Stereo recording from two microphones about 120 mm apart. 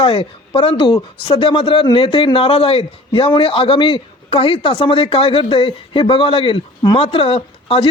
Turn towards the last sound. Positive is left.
turn(degrees=50)  # may be behind; listen again after turning